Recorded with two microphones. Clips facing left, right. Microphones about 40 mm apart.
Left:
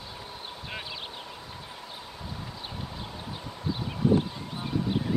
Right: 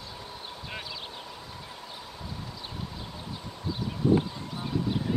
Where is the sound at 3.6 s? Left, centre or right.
Centre.